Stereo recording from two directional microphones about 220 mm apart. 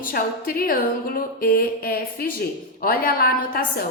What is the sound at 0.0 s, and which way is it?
A woman's voice, 40° left (ahead or behind).